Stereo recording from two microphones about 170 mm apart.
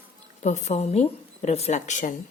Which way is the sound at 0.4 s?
40° left (ahead or behind).